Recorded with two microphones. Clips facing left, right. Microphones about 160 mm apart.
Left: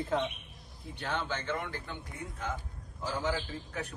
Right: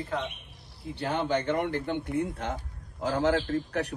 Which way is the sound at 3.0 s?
85° right.